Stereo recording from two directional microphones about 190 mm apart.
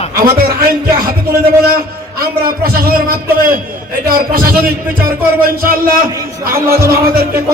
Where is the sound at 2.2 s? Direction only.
50° right (ahead or behind).